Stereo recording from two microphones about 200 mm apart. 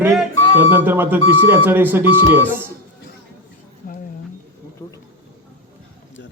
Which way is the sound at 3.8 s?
45° left (ahead or behind).